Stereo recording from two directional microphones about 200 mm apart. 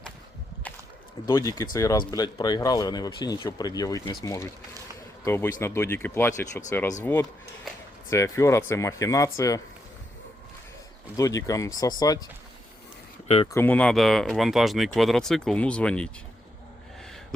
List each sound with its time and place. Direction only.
1.3 s speech: 15° left (ahead or behind)
11.2 s speech: 15° left (ahead or behind)
13.2 s speech: 30° left (ahead or behind)
13.5 s speech: 10° left (ahead or behind)